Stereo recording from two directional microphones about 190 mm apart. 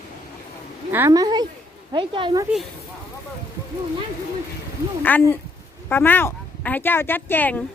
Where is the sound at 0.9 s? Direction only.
10° right (ahead or behind).